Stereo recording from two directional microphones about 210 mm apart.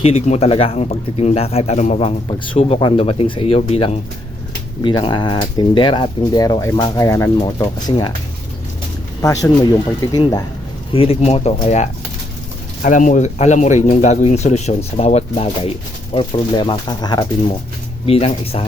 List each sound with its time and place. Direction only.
0.0 s speech: 30° left (ahead or behind)
9.2 s a man's voice: 15° left (ahead or behind)